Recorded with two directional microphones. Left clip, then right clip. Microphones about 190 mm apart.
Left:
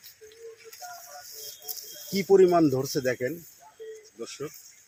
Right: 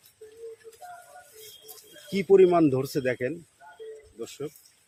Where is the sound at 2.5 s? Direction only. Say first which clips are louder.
Even; 10° right (ahead or behind).